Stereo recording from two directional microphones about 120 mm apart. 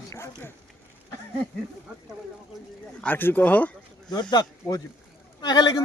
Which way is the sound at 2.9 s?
15° left (ahead or behind).